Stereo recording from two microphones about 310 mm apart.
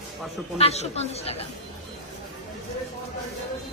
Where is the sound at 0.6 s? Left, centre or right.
Centre.